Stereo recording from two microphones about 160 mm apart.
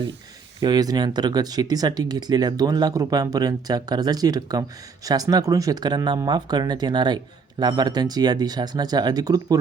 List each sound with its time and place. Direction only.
0.6 s speech: 25° right (ahead or behind)